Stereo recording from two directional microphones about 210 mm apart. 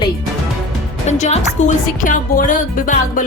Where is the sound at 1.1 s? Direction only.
35° left (ahead or behind).